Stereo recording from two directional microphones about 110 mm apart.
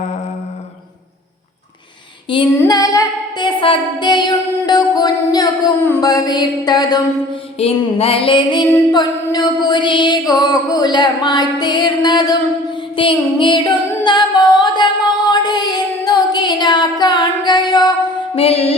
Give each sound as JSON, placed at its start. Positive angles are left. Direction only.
{"t": 2.3, "sound": "female singing", "side_deg": 50}
{"t": 2.6, "sound": "music", "side_deg": 35}
{"t": 3.4, "sound": "music", "side_deg": 50}
{"t": 7.6, "sound": "music", "side_deg": 60}
{"t": 13.0, "sound": "singing", "side_deg": 50}
{"t": 15.3, "sound": "a sound", "side_deg": 40}
{"t": 18.3, "sound": "music", "side_deg": 65}